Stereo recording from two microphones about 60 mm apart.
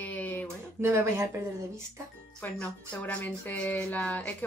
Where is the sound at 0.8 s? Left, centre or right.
Right.